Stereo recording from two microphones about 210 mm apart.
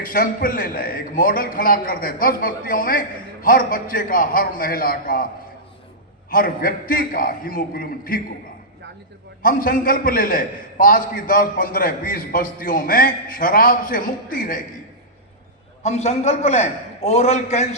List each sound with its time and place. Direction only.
0.0 s a man's voice: 40° left (ahead or behind)
6.3 s a man's voice: 45° left (ahead or behind)
9.4 s a man's voice: 40° left (ahead or behind)
15.8 s a man's voice: 30° left (ahead or behind)